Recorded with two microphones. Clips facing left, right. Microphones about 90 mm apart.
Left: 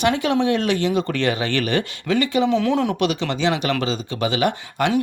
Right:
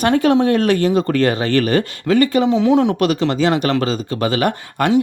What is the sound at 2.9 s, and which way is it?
Speech, 40° right (ahead or behind).